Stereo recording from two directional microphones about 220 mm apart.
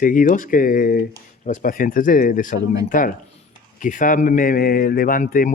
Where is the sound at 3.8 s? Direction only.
35° left (ahead or behind).